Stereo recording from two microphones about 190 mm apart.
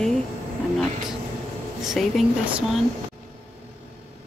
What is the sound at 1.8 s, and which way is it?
Speech, centre (ahead or behind).